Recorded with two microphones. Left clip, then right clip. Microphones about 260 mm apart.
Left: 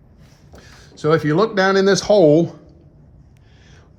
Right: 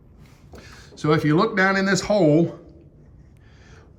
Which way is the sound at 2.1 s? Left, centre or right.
Right.